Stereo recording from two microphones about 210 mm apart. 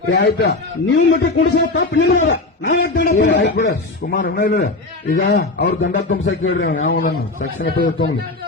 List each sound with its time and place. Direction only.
0.1 s a man's voice: 50° left (ahead or behind); by 6.7 s 70° left (ahead or behind)
6.7 s a man's voice: 40° left (ahead or behind)